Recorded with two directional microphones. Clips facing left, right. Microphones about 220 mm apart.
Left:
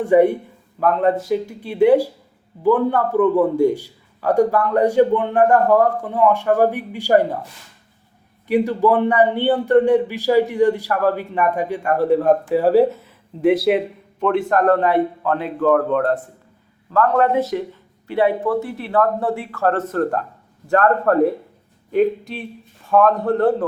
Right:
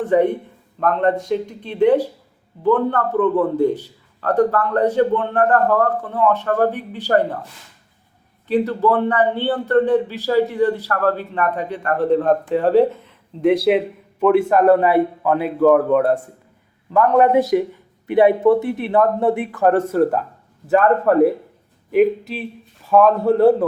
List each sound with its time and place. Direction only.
0.0 s a man's voice: 10° left (ahead or behind)
8.4 s a man's voice: 10° left (ahead or behind); by 23.6 s 10° right (ahead or behind)